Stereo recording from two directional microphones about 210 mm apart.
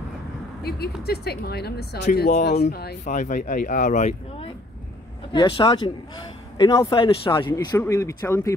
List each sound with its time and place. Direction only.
0.6 s speech: 50° left (ahead or behind)
3.1 s speech: 35° left (ahead or behind)
5.3 s a man's voice: 20° left (ahead or behind)